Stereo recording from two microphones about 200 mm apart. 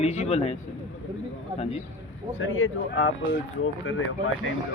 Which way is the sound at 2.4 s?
85° left.